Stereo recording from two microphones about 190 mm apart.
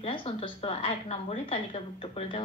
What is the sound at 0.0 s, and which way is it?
A woman's voice, 30° left (ahead or behind).